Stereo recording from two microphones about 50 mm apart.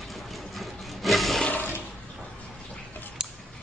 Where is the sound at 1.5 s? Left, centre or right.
Left.